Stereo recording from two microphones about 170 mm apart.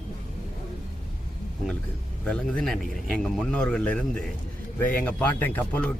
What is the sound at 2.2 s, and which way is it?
A man's voice, 5° left (ahead or behind).